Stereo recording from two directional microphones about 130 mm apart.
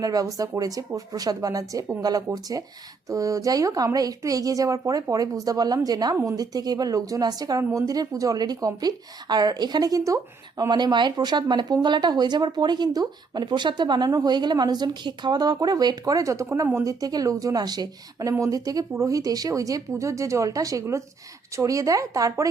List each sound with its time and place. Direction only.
0.0 s a woman's voice: 30° right (ahead or behind)